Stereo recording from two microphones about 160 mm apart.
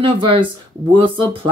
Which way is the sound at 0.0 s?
30° right (ahead or behind).